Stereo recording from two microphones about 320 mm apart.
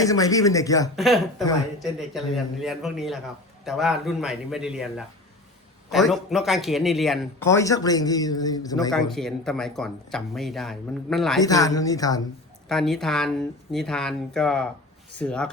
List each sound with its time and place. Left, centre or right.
0.0 s a man's voice: centre
0.9 s a man's voice: centre
11.4 s a man's voice: centre